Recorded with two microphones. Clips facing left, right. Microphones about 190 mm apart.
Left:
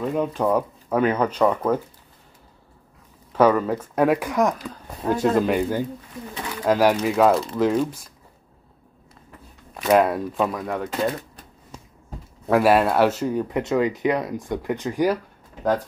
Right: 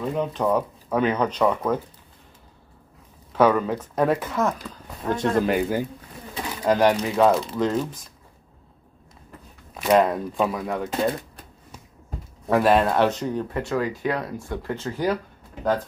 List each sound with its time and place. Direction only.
0.1 s speech: 10° left (ahead or behind)
3.3 s speech: 5° left (ahead or behind)
9.8 s speech: 5° left (ahead or behind)
12.4 s speech: 5° left (ahead or behind)